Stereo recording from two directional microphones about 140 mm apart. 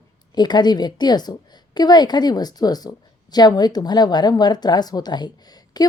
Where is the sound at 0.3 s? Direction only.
30° left (ahead or behind).